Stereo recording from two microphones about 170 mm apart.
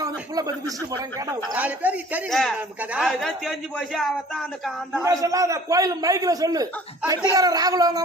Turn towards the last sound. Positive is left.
turn(degrees=-20)  # may be behind; listen again after turning